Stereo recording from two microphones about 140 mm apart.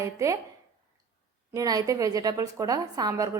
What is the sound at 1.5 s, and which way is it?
A woman's voice, 25° right (ahead or behind).